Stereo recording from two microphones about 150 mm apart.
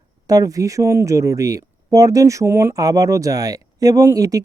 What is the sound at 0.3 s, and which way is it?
Speech, 25° right (ahead or behind).